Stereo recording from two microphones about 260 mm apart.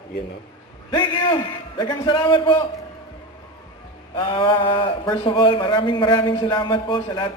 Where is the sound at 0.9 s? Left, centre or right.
Centre.